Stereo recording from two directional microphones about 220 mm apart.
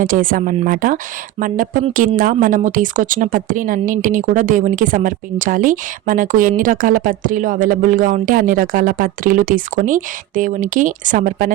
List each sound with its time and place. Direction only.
0.0 s speech: 40° right (ahead or behind)